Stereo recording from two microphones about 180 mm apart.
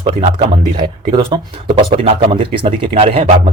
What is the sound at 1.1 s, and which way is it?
Speech, 25° right (ahead or behind).